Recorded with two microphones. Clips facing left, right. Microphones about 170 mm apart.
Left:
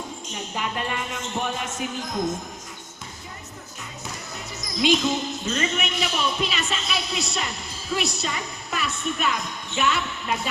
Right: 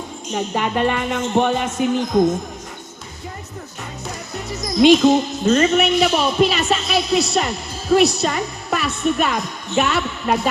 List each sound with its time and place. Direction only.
0.3 s speech: 65° right (ahead or behind)
4.6 s a woman's voice: 60° right (ahead or behind); by 10.5 s 45° right (ahead or behind)